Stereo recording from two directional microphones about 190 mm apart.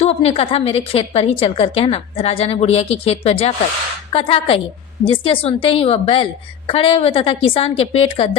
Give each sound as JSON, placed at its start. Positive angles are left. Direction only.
{"t": 0.0, "sound": "a woman's voice", "side_deg": 30}